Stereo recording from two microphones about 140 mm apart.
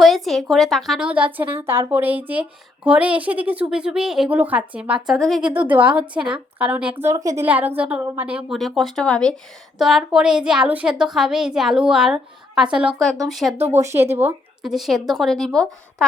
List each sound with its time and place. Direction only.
0.0 s a woman's voice: centre (ahead or behind)
5.5 s a woman's voice: 10° right (ahead or behind)
8.5 s a woman's voice: centre (ahead or behind)
13.8 s a woman's voice: 20° right (ahead or behind)
14.6 s a woman's voice: centre (ahead or behind)